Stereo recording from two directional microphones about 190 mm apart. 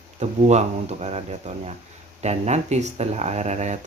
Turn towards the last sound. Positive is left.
turn(degrees=-35)  # may be behind; listen again after turning